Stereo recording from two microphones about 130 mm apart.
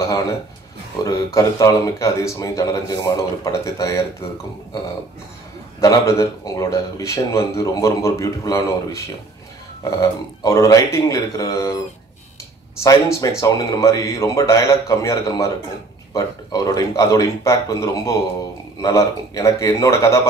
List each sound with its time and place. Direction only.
1.0 s speech: 25° left (ahead or behind)
5.8 s speech: 25° left (ahead or behind)
10.4 s speech: 25° left (ahead or behind)
12.8 s speech: 25° left (ahead or behind)